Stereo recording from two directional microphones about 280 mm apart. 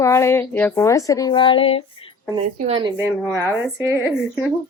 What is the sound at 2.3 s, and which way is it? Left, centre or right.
A woman's voice, centre.